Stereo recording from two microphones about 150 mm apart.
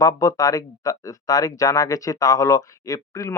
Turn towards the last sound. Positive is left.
turn(degrees=20)  # may be behind; listen again after turning